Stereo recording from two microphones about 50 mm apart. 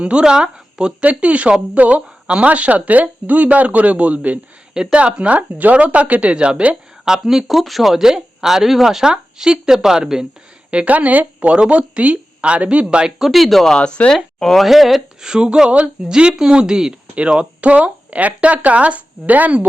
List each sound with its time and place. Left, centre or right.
0.0 s a woman's voice: centre
4.7 s speech: centre
7.0 s speech: centre
10.7 s speech: right
13.1 s speech: centre
13.7 s speech: left
14.3 s speech: centre
15.3 s speech: centre